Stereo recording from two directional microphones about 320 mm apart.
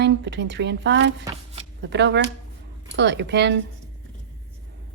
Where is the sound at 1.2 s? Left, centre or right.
Centre.